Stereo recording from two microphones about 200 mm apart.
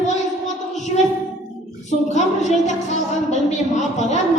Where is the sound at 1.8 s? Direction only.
35° left (ahead or behind).